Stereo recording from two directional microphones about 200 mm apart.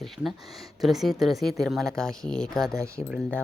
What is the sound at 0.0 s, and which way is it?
Speech, centre (ahead or behind).